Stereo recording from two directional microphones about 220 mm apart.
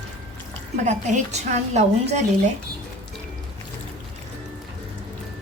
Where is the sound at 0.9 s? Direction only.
30° right (ahead or behind).